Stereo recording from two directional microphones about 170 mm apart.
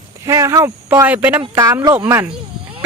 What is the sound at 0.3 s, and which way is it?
Speech, 15° right (ahead or behind).